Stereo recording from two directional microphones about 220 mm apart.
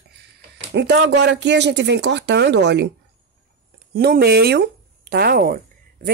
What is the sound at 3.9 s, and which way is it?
Speech, 45° right (ahead or behind).